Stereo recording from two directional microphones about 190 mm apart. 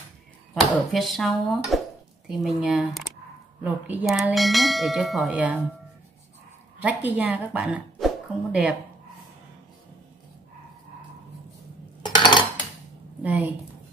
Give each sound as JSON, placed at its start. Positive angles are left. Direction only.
{"t": 0.9, "sound": "bell", "side_deg": 0}
{"t": 6.8, "sound": "speech", "side_deg": -10}
{"t": 12.0, "sound": "dishes", "side_deg": 20}
{"t": 13.2, "sound": "a woman's voice", "side_deg": -10}